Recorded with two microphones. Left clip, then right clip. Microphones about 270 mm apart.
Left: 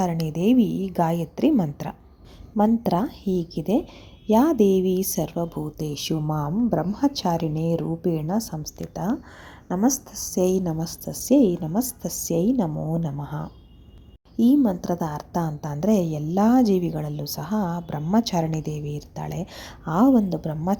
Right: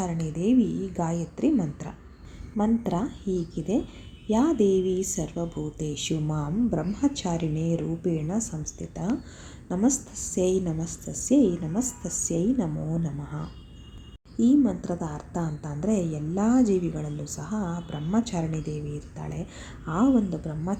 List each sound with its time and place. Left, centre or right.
0.0 s a woman's voice: left
9.6 s a woman's voice: left
14.5 s a woman's voice: left